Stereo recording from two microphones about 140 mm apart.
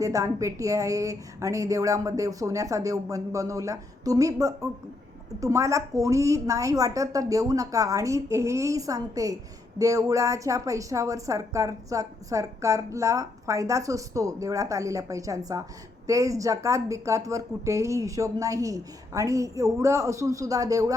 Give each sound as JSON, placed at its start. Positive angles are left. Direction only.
{"t": 0.0, "sound": "a woman's voice", "side_deg": -25}